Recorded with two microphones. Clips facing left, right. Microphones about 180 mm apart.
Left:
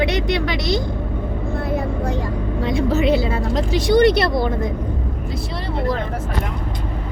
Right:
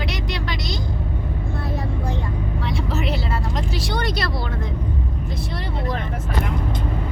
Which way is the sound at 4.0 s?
60° left (ahead or behind).